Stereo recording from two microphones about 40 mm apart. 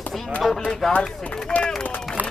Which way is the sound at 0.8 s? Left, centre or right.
Centre.